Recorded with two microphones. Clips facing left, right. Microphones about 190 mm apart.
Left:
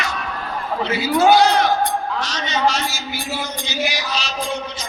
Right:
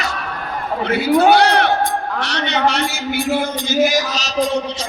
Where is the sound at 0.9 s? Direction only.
60° right (ahead or behind).